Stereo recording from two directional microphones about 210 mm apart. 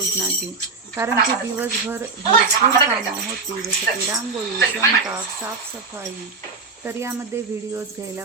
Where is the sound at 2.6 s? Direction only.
35° right (ahead or behind).